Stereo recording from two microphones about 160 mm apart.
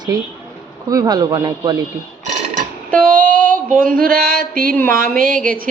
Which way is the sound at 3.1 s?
60° right (ahead or behind).